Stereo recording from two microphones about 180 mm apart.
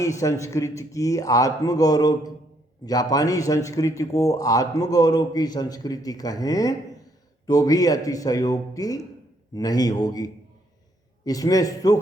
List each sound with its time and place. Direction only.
0.0 s a man's voice: 15° left (ahead or behind)